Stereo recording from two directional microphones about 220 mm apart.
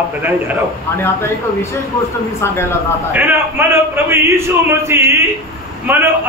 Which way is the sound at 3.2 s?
10° right (ahead or behind).